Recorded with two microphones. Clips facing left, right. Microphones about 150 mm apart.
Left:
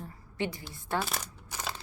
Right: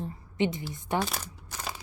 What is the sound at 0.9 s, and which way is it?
Speech, centre (ahead or behind).